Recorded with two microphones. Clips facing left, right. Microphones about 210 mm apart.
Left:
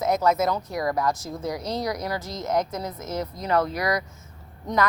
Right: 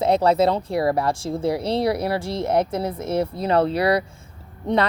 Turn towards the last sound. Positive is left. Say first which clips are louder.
# right 5 dB
turn(degrees=-30)  # may be behind; listen again after turning